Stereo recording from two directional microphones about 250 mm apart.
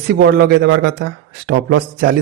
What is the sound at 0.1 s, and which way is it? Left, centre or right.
A man's voice, right.